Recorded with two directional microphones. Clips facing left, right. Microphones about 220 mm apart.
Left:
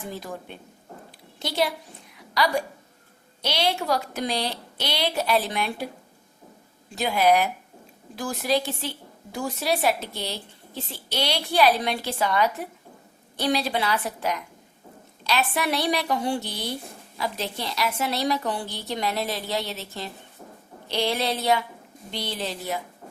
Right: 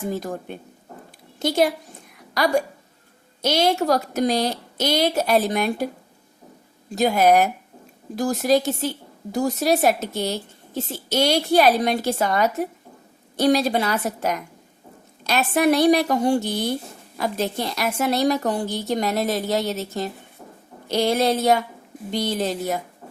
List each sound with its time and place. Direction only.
0.0 s a woman's voice: 45° right (ahead or behind)
2.1 s a sound: 45° right (ahead or behind)
3.4 s a woman's voice: 45° right (ahead or behind)
6.9 s a woman's voice: 45° right (ahead or behind)